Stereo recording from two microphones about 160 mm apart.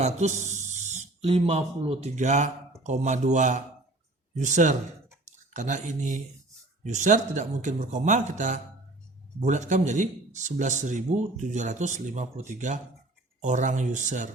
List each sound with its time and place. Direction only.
0.0 s speech: 45° right (ahead or behind)